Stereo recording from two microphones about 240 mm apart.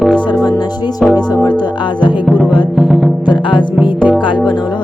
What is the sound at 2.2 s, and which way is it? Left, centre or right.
Music, centre.